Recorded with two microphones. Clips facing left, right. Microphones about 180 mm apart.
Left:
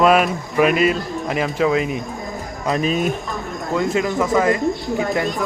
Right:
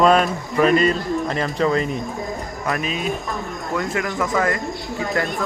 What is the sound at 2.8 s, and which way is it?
Speech, 45° left (ahead or behind).